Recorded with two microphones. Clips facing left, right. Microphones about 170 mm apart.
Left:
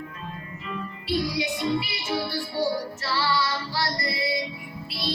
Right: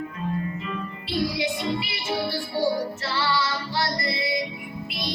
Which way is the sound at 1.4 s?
25° right (ahead or behind).